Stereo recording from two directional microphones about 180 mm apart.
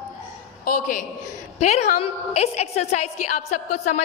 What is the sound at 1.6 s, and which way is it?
A woman's voice, 35° left (ahead or behind).